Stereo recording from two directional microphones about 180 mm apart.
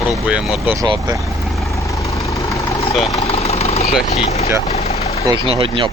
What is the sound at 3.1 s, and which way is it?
Engine, 35° left (ahead or behind).